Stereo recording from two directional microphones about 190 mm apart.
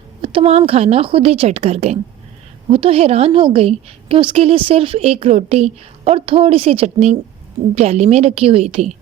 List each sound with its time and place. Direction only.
0.2 s a woman's voice: 30° right (ahead or behind)